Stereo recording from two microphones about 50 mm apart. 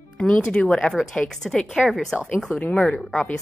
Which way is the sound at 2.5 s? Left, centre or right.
Left.